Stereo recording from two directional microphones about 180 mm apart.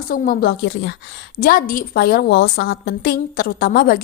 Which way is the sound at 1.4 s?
50° left (ahead or behind).